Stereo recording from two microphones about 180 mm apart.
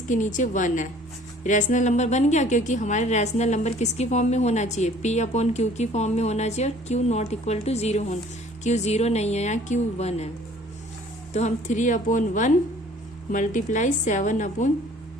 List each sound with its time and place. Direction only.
0.1 s a woman's voice: 45° left (ahead or behind)
11.3 s a woman's voice: 40° left (ahead or behind)